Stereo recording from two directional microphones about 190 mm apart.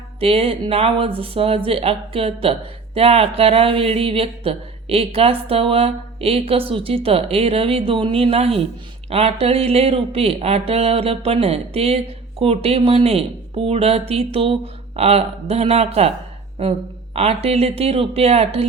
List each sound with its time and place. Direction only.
0.2 s speech: 30° right (ahead or behind)
17.2 s speech: 30° right (ahead or behind)